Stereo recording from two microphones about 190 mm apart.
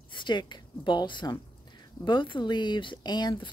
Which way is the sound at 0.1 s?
25° left (ahead or behind).